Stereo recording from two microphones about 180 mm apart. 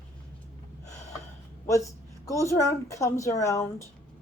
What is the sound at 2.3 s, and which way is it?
A woman's voice, 15° left (ahead or behind).